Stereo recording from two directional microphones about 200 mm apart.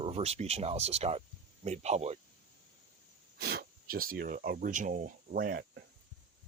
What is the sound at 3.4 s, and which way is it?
Speech, 50° right (ahead or behind).